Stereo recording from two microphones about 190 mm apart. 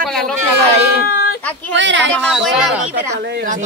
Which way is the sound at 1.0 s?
55° left (ahead or behind).